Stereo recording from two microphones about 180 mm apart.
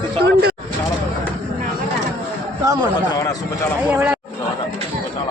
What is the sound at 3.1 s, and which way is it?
Speech, 20° left (ahead or behind).